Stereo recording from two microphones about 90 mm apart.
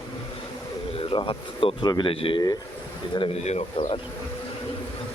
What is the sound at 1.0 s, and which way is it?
Speech, 80° left.